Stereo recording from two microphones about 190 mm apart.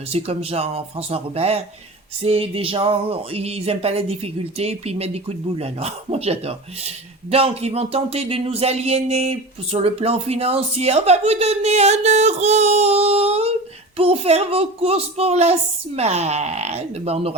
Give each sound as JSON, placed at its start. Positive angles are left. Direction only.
{"t": 0.1, "sound": "speech", "side_deg": -30}